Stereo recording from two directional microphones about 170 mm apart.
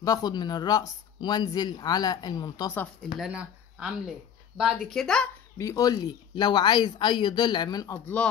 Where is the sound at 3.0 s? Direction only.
5° right (ahead or behind).